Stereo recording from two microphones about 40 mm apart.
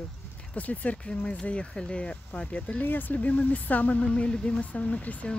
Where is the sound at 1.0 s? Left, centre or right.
Centre.